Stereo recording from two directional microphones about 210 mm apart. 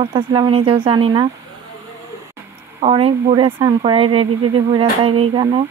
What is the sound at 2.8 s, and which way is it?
Speech, 30° right (ahead or behind).